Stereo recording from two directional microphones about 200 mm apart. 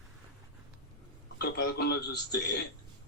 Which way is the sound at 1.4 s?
55° left (ahead or behind).